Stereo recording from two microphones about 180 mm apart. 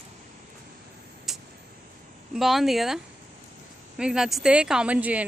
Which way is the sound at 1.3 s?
Centre (ahead or behind).